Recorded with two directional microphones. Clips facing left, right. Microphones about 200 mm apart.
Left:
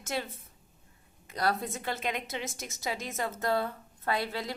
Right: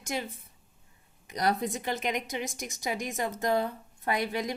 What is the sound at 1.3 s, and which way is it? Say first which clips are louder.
A woman's voice: right 2 dB; 15° right (ahead or behind).